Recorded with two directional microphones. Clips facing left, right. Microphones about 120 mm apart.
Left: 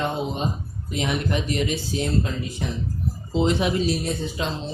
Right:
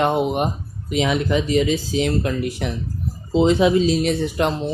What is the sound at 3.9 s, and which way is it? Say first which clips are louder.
Speech: right 7 dB; 85° right.